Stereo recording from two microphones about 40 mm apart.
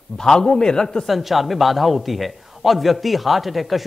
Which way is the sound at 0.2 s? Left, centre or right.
Centre.